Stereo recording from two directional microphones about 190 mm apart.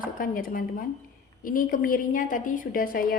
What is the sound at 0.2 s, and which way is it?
A woman's voice, 50° left (ahead or behind).